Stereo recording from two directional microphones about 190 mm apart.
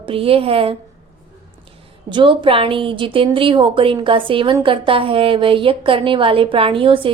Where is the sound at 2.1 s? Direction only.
25° right (ahead or behind).